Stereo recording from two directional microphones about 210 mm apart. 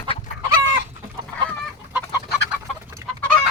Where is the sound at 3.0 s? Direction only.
15° right (ahead or behind).